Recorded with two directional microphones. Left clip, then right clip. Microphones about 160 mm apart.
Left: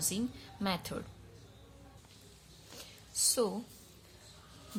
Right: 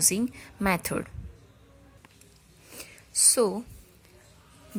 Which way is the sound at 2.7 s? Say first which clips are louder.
Right 8 dB; 20° right (ahead or behind).